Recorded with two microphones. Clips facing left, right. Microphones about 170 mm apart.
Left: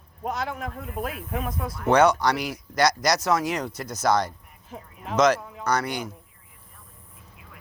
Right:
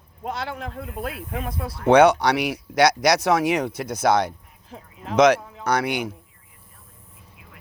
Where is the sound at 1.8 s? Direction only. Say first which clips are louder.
Right 4 dB; 65° right (ahead or behind).